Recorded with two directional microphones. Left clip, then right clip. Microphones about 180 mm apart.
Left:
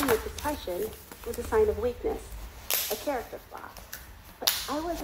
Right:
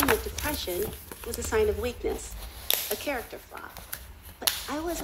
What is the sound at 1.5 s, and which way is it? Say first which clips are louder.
Speech: left 1 dB; 35° right (ahead or behind).